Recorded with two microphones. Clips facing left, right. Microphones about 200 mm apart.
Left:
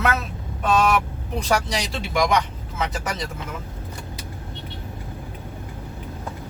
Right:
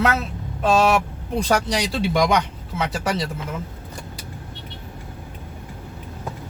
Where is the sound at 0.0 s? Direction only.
30° right (ahead or behind).